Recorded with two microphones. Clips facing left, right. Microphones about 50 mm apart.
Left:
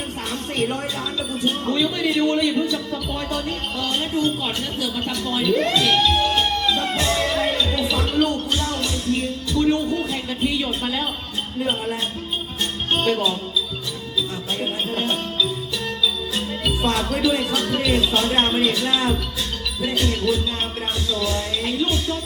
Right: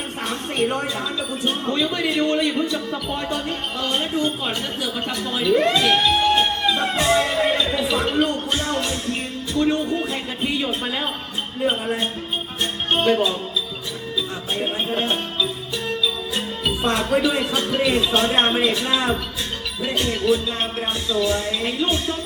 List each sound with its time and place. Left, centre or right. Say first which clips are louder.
0.3 s a sound: right 2 dB; centre
1.5 s a man's voice: left 1 dB; centre
6.8 s music: right 3 dB; centre; by 9.6 s right
9.9 s a man's voice: even; centre
14.6 s music: right 2 dB; centre
17.1 s speech: right 1 dB; centre